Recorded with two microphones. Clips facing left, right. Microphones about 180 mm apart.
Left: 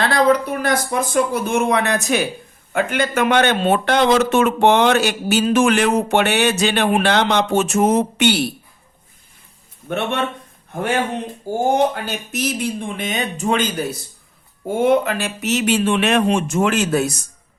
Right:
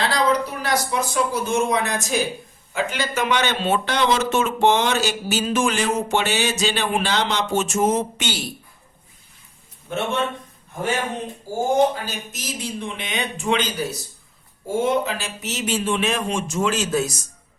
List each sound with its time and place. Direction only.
0.0 s speech: 55° left (ahead or behind)
9.9 s speech: 60° left (ahead or behind)
11.7 s speech: 65° left (ahead or behind)